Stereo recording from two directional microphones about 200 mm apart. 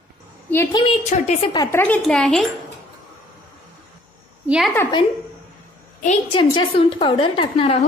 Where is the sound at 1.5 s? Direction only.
20° left (ahead or behind).